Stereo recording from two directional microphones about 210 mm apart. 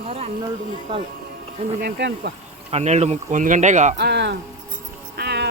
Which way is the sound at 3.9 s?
55° right (ahead or behind).